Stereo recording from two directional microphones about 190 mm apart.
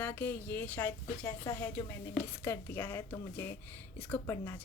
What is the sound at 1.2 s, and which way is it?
Speech, 20° left (ahead or behind).